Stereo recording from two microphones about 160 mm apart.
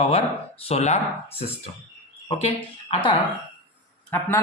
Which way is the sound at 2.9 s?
30° left (ahead or behind).